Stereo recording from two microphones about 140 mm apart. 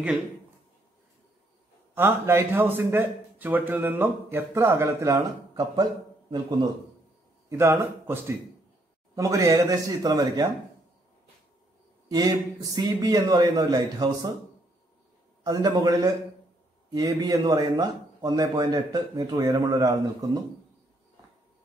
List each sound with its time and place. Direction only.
2.0 s a man's voice: 15° right (ahead or behind)
7.4 s a man's voice: 20° right (ahead or behind)
12.1 s a man's voice: 25° right (ahead or behind)
15.4 s a man's voice: 25° right (ahead or behind)